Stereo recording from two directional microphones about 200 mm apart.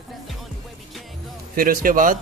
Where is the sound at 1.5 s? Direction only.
45° right (ahead or behind).